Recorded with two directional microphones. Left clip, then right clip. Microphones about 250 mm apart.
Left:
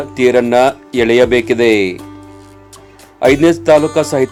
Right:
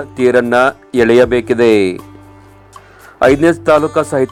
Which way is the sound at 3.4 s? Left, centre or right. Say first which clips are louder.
Left 1 dB; centre.